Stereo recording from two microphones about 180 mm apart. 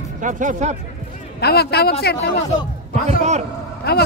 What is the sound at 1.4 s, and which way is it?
Speech, 60° left (ahead or behind).